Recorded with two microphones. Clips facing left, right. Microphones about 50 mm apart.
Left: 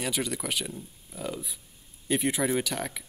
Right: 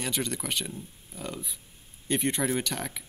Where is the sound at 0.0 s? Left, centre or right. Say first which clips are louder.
Left 1 dB; centre.